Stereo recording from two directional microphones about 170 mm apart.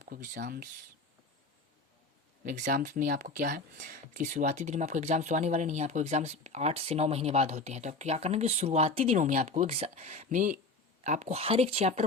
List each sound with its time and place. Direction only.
0.0 s speech: 55° right (ahead or behind)
2.4 s speech: 50° right (ahead or behind)